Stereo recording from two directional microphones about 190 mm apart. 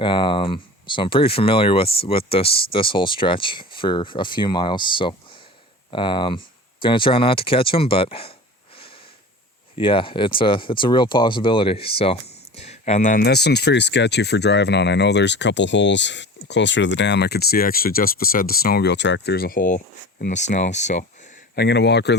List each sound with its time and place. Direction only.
0.0 s speech: 25° left (ahead or behind)
9.7 s speech: 25° left (ahead or behind)
13.2 s speech: 60° left (ahead or behind); by 21.0 s 40° left (ahead or behind)
21.5 s speech: 60° left (ahead or behind)